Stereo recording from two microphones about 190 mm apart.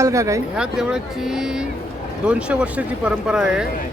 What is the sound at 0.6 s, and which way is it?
Speech, 5° right (ahead or behind).